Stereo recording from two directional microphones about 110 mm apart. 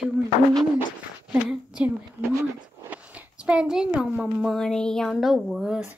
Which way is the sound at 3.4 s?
5° right (ahead or behind).